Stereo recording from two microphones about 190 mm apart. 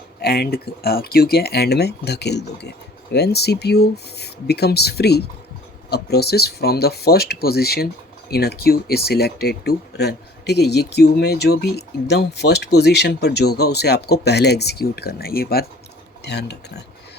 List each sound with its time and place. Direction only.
0.2 s speech: 55° left (ahead or behind)